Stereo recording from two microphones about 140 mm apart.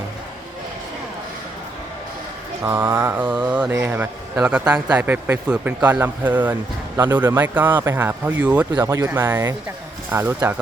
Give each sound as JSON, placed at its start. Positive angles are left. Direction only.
{"t": 2.6, "sound": "a man's voice", "side_deg": -20}